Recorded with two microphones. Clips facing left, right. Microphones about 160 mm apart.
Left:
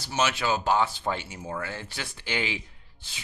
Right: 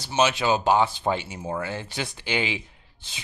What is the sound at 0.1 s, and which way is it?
Speech, 20° right (ahead or behind).